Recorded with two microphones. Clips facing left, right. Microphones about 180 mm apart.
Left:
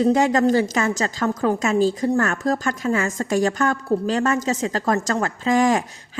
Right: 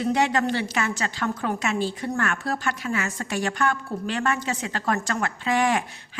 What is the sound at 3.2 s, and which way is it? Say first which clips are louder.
A woman's voice: left 6 dB; 40° left (ahead or behind).